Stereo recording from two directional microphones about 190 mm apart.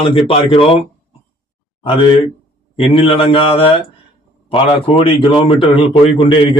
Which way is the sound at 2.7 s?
30° left (ahead or behind).